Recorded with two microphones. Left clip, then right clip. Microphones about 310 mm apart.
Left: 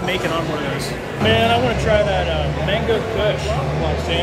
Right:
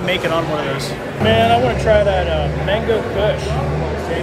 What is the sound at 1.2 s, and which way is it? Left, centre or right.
Speech, centre.